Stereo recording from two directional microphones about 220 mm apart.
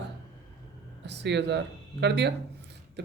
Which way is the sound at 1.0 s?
50° right (ahead or behind).